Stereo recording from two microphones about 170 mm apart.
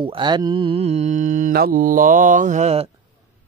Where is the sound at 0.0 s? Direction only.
30° right (ahead or behind).